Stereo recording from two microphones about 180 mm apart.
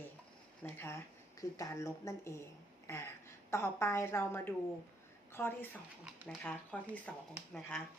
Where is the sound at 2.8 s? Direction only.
15° left (ahead or behind).